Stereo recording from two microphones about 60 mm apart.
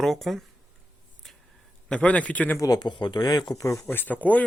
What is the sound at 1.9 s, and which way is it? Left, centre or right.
Speech, left.